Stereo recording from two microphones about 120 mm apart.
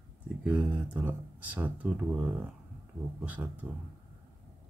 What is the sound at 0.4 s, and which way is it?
Speech, 15° right (ahead or behind).